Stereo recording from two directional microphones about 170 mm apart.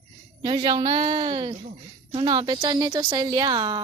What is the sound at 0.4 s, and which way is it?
A woman's voice, 25° right (ahead or behind).